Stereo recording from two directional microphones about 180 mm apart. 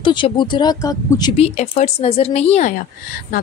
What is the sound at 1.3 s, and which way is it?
Speech, 35° left (ahead or behind).